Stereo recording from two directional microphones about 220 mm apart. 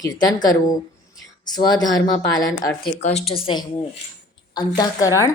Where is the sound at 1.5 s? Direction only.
20° left (ahead or behind).